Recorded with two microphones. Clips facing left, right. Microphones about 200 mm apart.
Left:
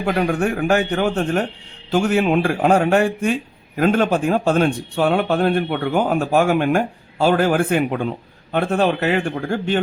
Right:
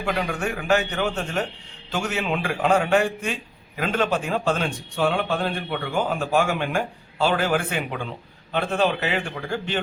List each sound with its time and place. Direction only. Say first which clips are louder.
0.0 s speech: left 7 dB; 55° left (ahead or behind)